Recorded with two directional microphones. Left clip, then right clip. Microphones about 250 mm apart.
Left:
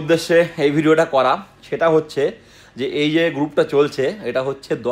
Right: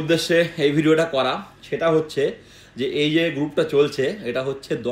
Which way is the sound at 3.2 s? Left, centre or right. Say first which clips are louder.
Left 4 dB; centre.